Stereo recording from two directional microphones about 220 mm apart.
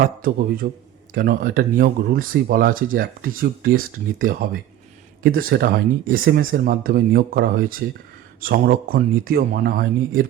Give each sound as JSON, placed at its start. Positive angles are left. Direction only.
{"t": 0.0, "sound": "speech", "side_deg": -40}